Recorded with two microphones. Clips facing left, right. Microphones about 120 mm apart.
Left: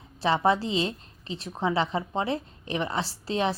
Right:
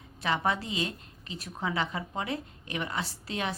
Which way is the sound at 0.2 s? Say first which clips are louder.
Left 6 dB; 30° left (ahead or behind).